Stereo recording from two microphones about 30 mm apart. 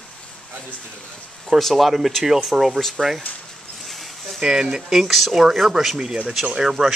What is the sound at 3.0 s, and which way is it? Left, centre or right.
Speech, centre.